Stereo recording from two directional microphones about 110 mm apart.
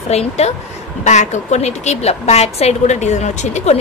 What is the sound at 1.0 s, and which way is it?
A woman's voice, 90° left.